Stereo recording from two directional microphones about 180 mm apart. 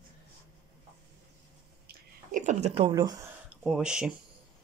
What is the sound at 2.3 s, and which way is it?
Speech, 45° right (ahead or behind).